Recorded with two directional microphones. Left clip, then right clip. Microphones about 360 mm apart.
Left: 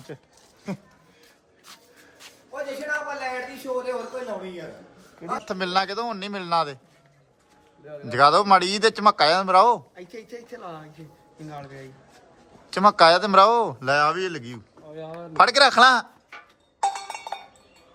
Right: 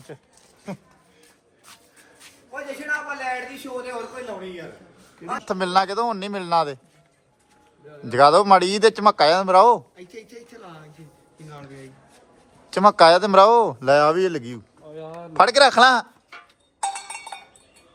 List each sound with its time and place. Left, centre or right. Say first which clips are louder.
0.7 s speech: even; centre
1.6 s a sound: left 1 dB; centre
3.9 s speech: left 1 dB; centre
5.5 s a man's voice: right 5 dB; centre
8.0 s a man's voice: right 3 dB; centre
9.9 s speech: left 2 dB; centre
12.7 s a man's voice: right 2 dB; centre
14.9 s a sound: right 1 dB; right
15.3 s speech: right 2 dB; centre
16.8 s cowbell: left 2 dB; centre